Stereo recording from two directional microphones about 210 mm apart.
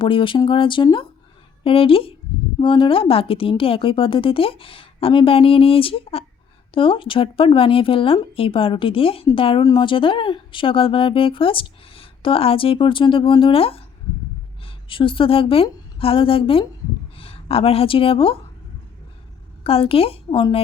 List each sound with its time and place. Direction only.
0.0 s a woman's voice: 25° left (ahead or behind)
19.6 s a woman's voice: 25° left (ahead or behind)